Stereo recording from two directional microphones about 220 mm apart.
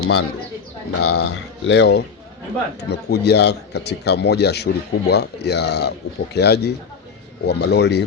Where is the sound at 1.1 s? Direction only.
55° left (ahead or behind).